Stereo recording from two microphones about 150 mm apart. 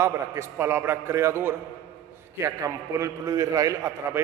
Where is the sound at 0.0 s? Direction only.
20° right (ahead or behind).